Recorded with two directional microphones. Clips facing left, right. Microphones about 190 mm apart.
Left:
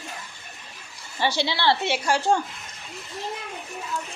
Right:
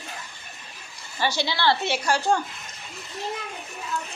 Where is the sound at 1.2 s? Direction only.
25° left (ahead or behind).